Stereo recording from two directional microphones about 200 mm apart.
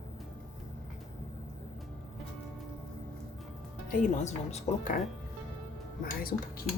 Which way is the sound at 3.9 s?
35° left (ahead or behind).